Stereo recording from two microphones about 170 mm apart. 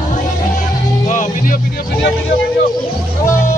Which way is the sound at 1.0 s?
50° left (ahead or behind).